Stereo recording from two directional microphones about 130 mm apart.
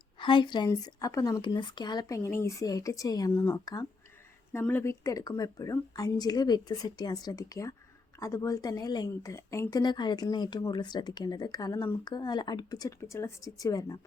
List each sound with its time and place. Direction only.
0.2 s speech: 35° left (ahead or behind)
13.0 s speech: 20° left (ahead or behind)